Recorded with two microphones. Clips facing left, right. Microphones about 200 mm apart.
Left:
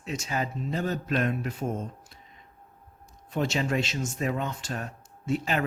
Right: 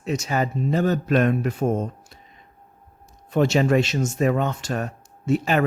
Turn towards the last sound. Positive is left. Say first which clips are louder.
# right 7 dB
turn(degrees=-80)